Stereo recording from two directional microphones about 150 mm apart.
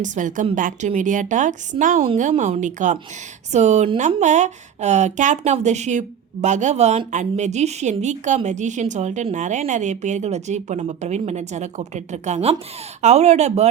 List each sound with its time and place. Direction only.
0.0 s speech: 55° right (ahead or behind)
2.3 s a woman's voice: 45° right (ahead or behind)